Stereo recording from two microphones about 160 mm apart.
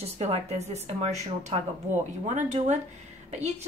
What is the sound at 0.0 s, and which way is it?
A woman's voice, 40° right (ahead or behind).